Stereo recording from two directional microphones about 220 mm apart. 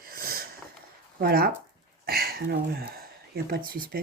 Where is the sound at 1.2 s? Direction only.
45° right (ahead or behind).